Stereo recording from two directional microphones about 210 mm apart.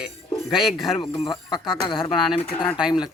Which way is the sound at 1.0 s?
25° left (ahead or behind).